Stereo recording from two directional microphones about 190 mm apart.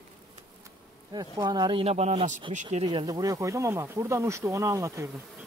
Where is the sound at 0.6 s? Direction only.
20° right (ahead or behind).